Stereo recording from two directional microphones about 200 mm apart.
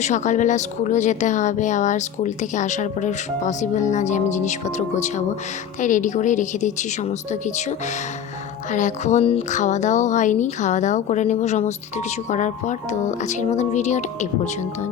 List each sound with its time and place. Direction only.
0.0 s speech: 35° left (ahead or behind)